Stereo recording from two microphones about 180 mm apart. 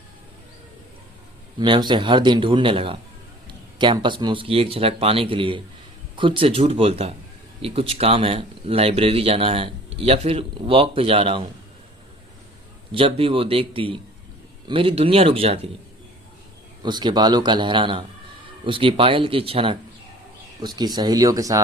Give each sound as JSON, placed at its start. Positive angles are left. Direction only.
{"t": 1.5, "sound": "speech", "side_deg": -25}
{"t": 12.9, "sound": "speech", "side_deg": -30}
{"t": 16.8, "sound": "speech", "side_deg": -25}